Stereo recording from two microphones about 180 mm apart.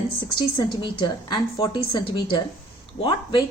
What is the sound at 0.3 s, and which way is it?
Speech, 25° left (ahead or behind).